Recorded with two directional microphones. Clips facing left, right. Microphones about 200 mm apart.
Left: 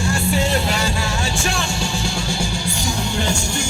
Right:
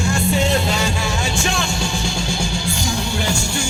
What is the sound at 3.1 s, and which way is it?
Music, 10° right (ahead or behind).